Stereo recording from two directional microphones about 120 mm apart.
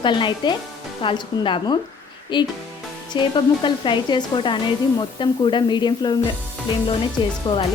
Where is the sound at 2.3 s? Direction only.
40° left (ahead or behind).